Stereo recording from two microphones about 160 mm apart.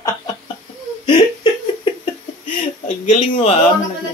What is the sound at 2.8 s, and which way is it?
Speech, 50° left (ahead or behind).